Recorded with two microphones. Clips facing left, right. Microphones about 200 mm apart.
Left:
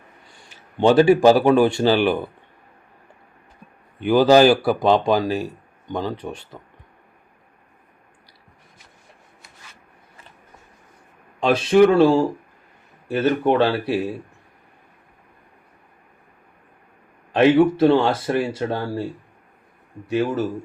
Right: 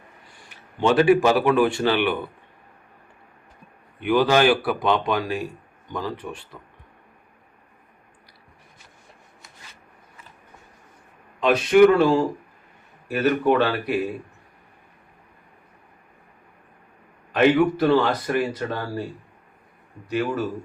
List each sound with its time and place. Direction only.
0.8 s speech: 30° left (ahead or behind)
4.0 s speech: 35° left (ahead or behind)
11.3 s speech: 30° left (ahead or behind)
17.3 s speech: 25° left (ahead or behind)
20.1 s speech: 25° left (ahead or behind)